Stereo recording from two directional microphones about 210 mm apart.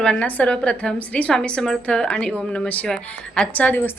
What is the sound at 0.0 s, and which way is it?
A woman's voice, 5° left (ahead or behind).